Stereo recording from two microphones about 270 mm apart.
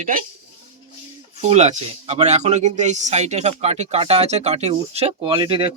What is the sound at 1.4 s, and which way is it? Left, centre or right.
Speech, right.